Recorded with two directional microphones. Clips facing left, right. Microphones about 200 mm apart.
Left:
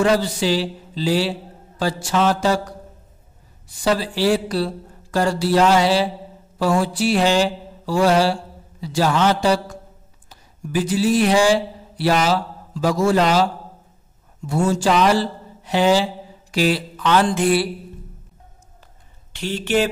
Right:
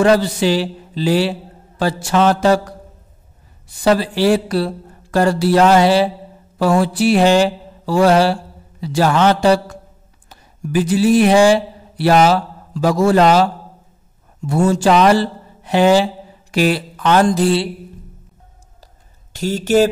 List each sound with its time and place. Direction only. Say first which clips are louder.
0.0 s a man's voice: right 5 dB; 60° right (ahead or behind)
3.8 s a man's voice: right 5 dB; 60° right (ahead or behind)
14.5 s a man's voice: right 4 dB; 60° right (ahead or behind)
16.5 s a sound: right 3 dB; 55° right (ahead or behind); by 17.6 s 30° right (ahead or behind)
19.3 s speech: right 6 dB; 40° right (ahead or behind)